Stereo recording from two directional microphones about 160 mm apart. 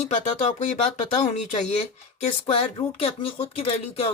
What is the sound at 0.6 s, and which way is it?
Speech, 50° left (ahead or behind).